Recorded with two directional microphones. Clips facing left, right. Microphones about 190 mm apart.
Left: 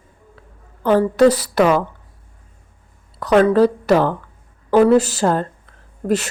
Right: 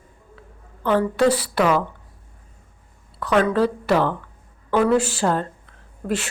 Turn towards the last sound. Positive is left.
turn(degrees=40)  # may be behind; listen again after turning